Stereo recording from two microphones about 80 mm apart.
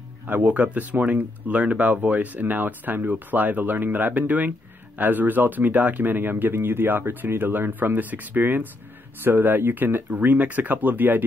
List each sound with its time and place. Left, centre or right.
0.3 s speech: centre